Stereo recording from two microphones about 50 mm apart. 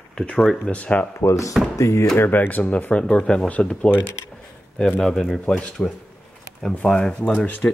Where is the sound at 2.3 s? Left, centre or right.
Left.